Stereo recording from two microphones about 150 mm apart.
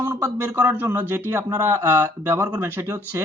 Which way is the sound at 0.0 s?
20° right (ahead or behind).